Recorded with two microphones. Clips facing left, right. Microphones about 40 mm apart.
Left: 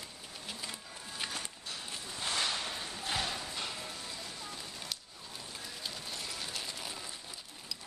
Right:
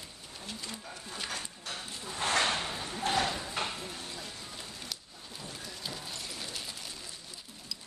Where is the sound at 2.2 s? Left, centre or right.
Right.